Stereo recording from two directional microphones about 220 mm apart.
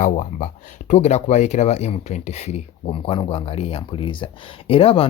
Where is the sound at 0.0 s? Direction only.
35° left (ahead or behind).